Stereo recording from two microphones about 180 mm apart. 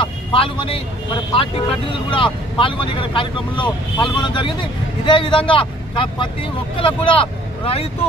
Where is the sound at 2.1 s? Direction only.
30° left (ahead or behind).